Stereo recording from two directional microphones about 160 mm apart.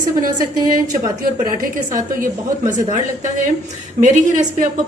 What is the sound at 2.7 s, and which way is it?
A woman's voice, 50° right (ahead or behind).